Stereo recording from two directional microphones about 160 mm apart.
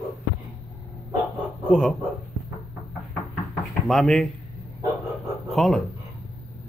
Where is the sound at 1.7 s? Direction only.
5° left (ahead or behind).